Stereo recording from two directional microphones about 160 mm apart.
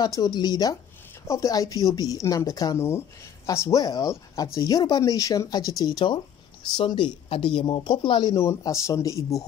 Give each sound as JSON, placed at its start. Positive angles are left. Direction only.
{"t": 0.0, "sound": "speech", "side_deg": 25}